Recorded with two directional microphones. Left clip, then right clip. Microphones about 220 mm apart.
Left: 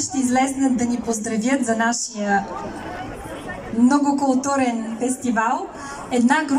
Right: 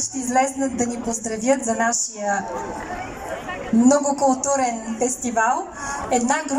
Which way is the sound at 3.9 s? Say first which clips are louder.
Right 1 dB; 20° right (ahead or behind).